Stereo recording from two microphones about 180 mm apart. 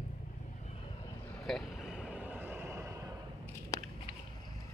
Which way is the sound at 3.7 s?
20° left (ahead or behind).